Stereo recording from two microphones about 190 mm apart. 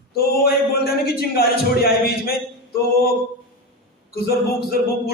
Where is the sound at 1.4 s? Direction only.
55° left (ahead or behind).